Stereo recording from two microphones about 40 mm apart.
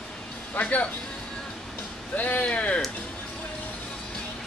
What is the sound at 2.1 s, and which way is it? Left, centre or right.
Speech, left.